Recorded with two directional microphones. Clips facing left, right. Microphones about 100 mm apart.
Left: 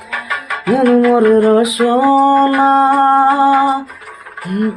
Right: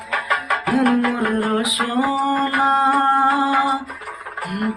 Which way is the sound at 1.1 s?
25° left (ahead or behind).